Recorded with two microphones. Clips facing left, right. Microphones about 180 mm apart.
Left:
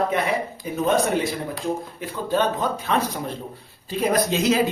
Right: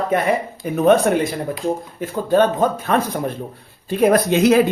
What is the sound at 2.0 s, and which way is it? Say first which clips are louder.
Speech: right 8 dB; 45° right (ahead or behind).